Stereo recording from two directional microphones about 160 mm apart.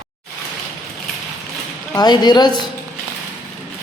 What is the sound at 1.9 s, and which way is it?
Speech, 25° left (ahead or behind).